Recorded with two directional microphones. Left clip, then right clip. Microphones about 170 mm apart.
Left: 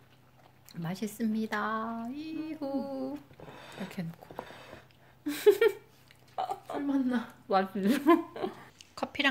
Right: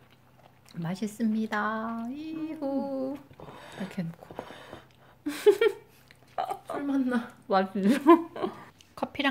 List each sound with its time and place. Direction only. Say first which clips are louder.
0.7 s speech: right 2 dB; 5° right (ahead or behind)
5.2 s a sound: right 1 dB; 10° right (ahead or behind)
6.3 s burping: right 2 dB; 10° right (ahead or behind)
6.9 s a woman's voice: right 2 dB; 50° right (ahead or behind)
7.4 s a woman's voice: right 3 dB; 10° right (ahead or behind)